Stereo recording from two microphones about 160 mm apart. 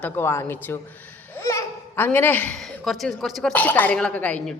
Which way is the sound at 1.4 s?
15° left (ahead or behind).